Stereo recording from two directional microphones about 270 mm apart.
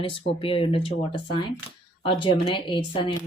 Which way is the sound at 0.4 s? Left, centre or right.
Centre.